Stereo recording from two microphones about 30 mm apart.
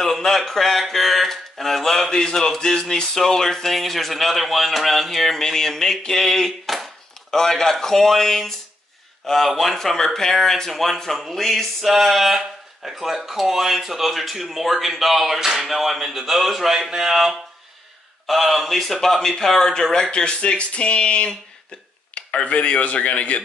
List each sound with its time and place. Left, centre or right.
0.0 s a man's voice: centre
0.4 s a sound: centre
2.0 s a man's voice: left; by 6.9 s centre
7.2 s a man's voice: centre
9.8 s speech: centre
10.7 s a man's voice: centre
11.5 s a man's voice: centre
15.3 s a man's voice: centre
18.9 s speech: centre
20.1 s speech: left
22.3 s a man's voice: left